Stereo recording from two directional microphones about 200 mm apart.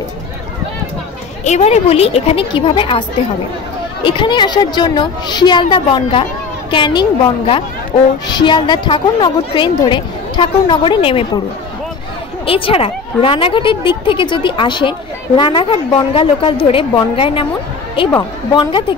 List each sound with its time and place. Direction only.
1.4 s a woman's voice: 35° left (ahead or behind)
12.4 s a woman's voice: 25° left (ahead or behind)